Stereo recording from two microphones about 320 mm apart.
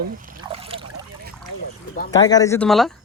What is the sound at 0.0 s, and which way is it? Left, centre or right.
Speech, right.